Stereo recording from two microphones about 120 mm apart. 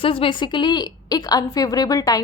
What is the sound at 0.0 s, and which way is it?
A woman's voice, 50° left (ahead or behind).